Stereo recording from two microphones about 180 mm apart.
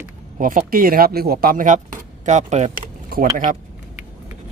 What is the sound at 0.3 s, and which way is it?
Speech, 50° right (ahead or behind).